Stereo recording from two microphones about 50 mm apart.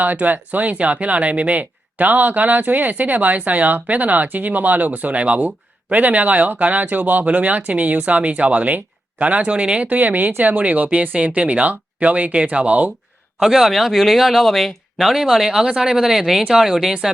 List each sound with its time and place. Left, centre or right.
0.0 s speech: right; by 9.9 s centre
9.9 s speech: right
13.4 s speech: centre